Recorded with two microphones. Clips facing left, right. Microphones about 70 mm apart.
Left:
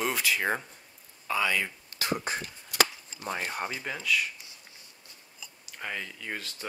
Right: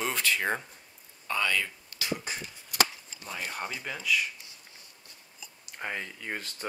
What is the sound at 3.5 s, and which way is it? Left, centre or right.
Speech, centre.